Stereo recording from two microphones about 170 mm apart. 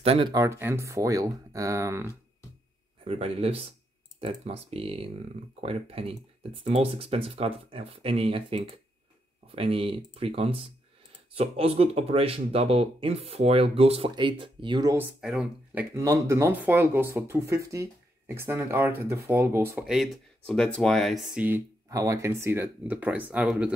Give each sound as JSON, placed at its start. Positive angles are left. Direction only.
{"t": 0.0, "sound": "speech", "side_deg": -35}
{"t": 0.3, "sound": "speech", "side_deg": -15}
{"t": 3.1, "sound": "speech", "side_deg": -35}
{"t": 15.0, "sound": "speech", "side_deg": -5}
{"t": 19.9, "sound": "speech", "side_deg": 0}